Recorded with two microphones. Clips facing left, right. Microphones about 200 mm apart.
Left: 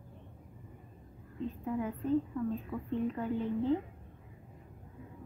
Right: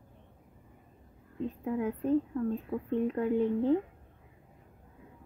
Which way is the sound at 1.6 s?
60° right (ahead or behind).